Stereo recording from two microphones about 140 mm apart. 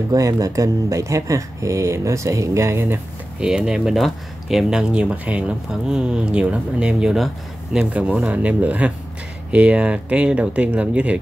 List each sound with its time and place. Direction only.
0.1 s speech: 25° right (ahead or behind)
3.3 s speech: 5° right (ahead or behind)